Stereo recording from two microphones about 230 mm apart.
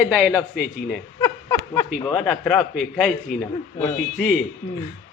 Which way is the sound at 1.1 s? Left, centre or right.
Centre.